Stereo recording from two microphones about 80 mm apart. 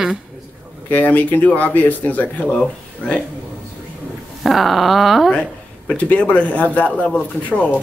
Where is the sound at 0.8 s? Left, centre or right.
Left.